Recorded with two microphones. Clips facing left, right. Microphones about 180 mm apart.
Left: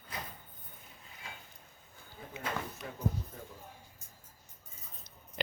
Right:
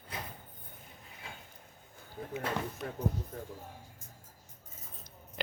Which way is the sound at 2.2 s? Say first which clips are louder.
Right 7 dB; 55° right (ahead or behind).